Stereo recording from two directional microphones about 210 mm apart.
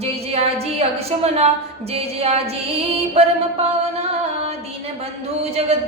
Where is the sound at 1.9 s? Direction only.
30° right (ahead or behind).